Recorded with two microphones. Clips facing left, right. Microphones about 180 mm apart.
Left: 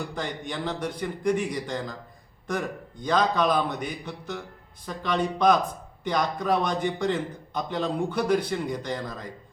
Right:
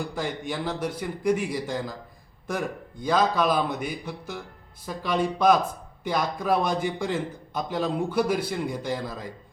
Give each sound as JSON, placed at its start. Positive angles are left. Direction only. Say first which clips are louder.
{"t": 0.1, "sound": "a man's voice", "louder": "right 2 dB", "side_deg": -5}